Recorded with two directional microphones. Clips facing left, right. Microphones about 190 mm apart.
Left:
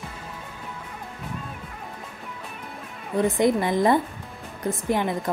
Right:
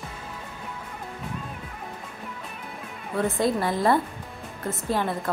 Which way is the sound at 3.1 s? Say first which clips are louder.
Left 3 dB; 15° left (ahead or behind).